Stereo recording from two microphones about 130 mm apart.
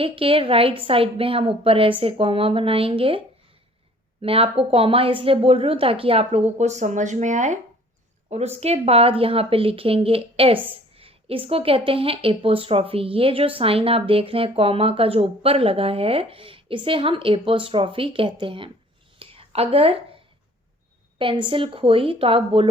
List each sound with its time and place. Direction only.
0.0 s a woman's voice: 45° right (ahead or behind)
4.2 s a woman's voice: 45° right (ahead or behind); by 7.6 s 70° right (ahead or behind)
8.3 s a woman's voice: 55° right (ahead or behind)
19.2 s a sound: 45° right (ahead or behind)
21.2 s a woman's voice: 40° right (ahead or behind)